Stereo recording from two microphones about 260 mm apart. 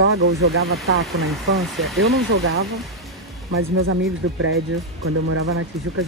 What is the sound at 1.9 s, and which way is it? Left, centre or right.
Speech, right.